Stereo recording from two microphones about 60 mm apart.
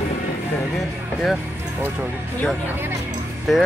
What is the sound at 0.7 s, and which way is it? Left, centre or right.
Speech, centre.